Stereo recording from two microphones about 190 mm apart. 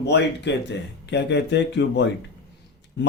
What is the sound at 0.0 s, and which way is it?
Speech, 65° left (ahead or behind).